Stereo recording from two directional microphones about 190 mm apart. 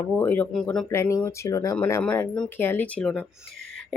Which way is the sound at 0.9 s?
15° left (ahead or behind).